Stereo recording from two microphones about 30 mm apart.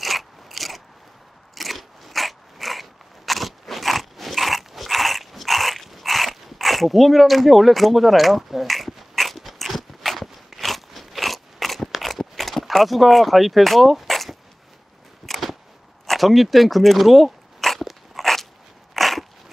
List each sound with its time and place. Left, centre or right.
0.0 s mechanisms: centre
1.5 s biting: centre
11.9 s crunch: centre
12.6 s speech: centre
15.2 s a sound: centre
16.1 s speech: centre
17.6 s dog: centre
17.8 s crunch: centre
18.9 s dog: centre